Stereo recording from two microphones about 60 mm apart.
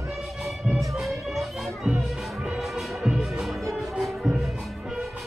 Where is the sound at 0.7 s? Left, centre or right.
Centre.